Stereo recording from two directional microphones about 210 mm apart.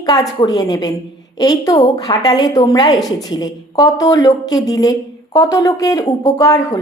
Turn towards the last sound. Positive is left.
turn(degrees=15)  # may be behind; listen again after turning